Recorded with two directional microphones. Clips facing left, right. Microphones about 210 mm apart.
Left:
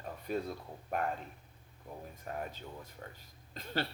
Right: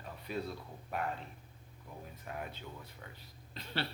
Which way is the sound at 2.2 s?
40° left (ahead or behind).